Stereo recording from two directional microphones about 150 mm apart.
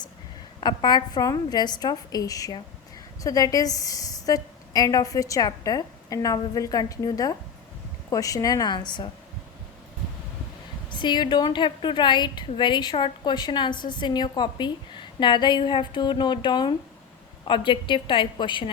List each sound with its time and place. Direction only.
0.6 s a woman's voice: 30° left (ahead or behind)
10.8 s a woman's voice: 30° left (ahead or behind)